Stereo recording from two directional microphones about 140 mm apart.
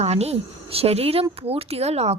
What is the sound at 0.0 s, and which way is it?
Speech, 50° right (ahead or behind).